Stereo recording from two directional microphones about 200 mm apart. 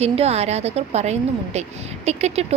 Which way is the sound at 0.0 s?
30° right (ahead or behind).